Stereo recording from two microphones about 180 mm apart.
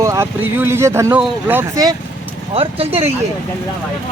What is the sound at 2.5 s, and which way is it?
Speech, 35° right (ahead or behind).